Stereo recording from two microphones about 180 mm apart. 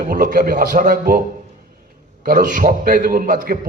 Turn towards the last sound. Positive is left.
turn(degrees=-50)  # may be behind; listen again after turning